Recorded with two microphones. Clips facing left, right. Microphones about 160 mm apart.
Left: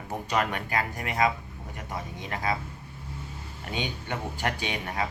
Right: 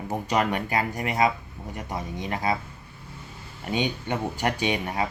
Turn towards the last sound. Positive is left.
turn(degrees=-20)  # may be behind; listen again after turning